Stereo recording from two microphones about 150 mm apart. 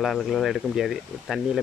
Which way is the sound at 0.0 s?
Centre (ahead or behind).